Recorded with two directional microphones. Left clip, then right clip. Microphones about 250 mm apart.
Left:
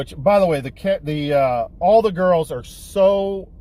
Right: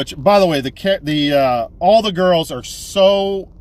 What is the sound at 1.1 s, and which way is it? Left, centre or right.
Speech, centre.